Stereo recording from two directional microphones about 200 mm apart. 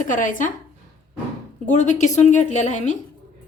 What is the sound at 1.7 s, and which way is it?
A woman's voice, 35° left (ahead or behind).